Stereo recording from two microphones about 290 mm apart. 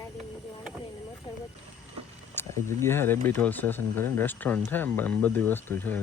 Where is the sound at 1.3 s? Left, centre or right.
Centre.